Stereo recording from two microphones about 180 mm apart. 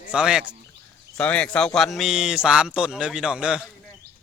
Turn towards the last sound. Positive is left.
turn(degrees=-5)  # may be behind; listen again after turning